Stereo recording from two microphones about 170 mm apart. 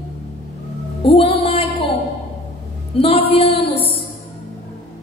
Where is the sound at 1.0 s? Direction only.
35° left (ahead or behind).